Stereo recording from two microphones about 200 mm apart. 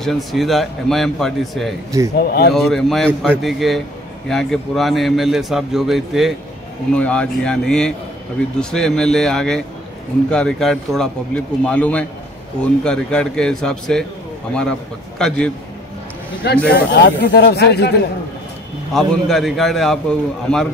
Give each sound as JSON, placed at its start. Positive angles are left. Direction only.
{"t": 0.0, "sound": "a man's voice", "side_deg": 0}
{"t": 2.1, "sound": "speech", "side_deg": 50}
{"t": 2.5, "sound": "a man's voice", "side_deg": 0}
{"t": 15.1, "sound": "a man's voice", "side_deg": 5}
{"t": 16.6, "sound": "speech", "side_deg": 50}
{"t": 18.9, "sound": "a man's voice", "side_deg": 0}